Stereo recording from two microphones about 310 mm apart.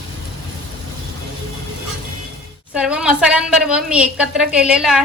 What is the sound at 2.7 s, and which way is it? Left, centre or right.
A woman's voice, centre.